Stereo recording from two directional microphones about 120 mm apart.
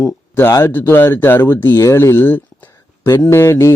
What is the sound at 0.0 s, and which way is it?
A man's voice, 20° left (ahead or behind).